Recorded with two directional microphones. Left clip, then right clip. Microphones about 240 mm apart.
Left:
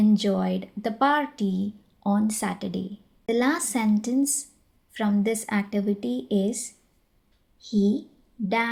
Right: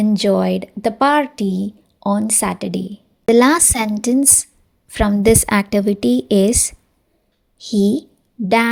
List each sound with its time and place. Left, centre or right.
0.0 s speech: right